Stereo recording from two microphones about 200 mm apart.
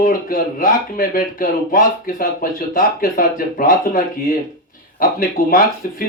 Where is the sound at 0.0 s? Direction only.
45° left (ahead or behind).